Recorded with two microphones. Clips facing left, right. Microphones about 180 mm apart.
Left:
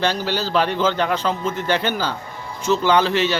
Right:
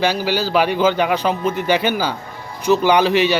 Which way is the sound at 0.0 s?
10° right (ahead or behind).